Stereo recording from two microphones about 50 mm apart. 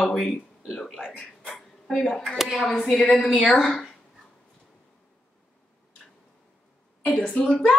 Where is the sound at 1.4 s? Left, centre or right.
Centre.